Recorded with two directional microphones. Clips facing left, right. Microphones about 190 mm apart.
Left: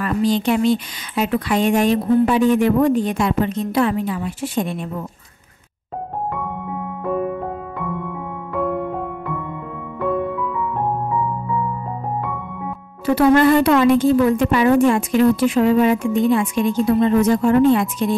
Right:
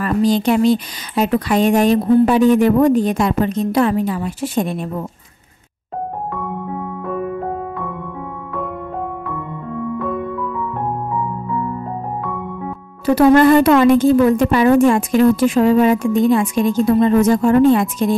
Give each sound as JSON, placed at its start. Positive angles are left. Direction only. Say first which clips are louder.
{"t": 0.0, "sound": "a woman's voice", "louder": "right 3 dB", "side_deg": -40}
{"t": 13.0, "sound": "a woman's voice", "louder": "right 3 dB", "side_deg": -45}